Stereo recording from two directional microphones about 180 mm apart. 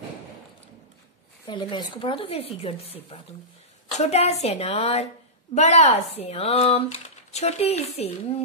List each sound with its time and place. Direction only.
1.5 s speech: 25° left (ahead or behind)